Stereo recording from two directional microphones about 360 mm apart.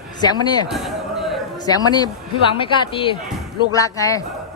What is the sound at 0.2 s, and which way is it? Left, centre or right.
Speech, centre.